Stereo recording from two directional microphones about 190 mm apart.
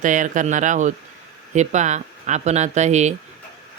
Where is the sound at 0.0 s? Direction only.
40° right (ahead or behind).